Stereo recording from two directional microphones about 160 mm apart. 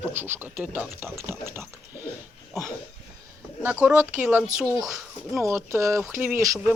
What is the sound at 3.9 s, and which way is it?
Speech, 10° right (ahead or behind).